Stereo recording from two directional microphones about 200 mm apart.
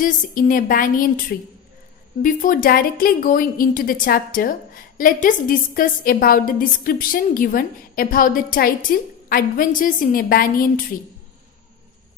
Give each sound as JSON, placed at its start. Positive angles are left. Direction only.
{"t": 0.0, "sound": "a woman's voice", "side_deg": 45}
{"t": 2.2, "sound": "a woman's voice", "side_deg": 45}